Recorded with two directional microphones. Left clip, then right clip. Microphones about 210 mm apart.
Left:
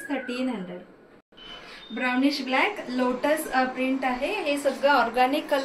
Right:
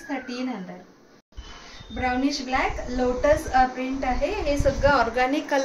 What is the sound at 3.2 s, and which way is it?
A woman's voice, 10° right (ahead or behind).